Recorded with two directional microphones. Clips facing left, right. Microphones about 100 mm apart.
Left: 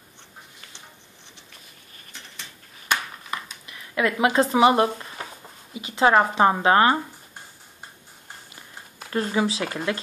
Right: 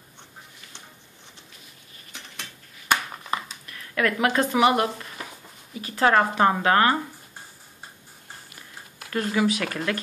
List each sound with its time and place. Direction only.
3.6 s speech: 20° left (ahead or behind)
9.1 s speech: 25° left (ahead or behind)